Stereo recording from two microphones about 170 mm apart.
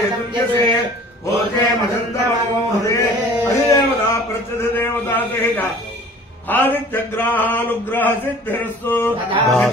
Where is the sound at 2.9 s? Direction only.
20° left (ahead or behind).